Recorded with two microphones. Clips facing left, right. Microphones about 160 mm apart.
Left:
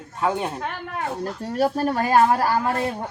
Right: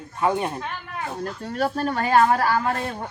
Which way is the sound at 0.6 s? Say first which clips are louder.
Left 3 dB; 50° left (ahead or behind).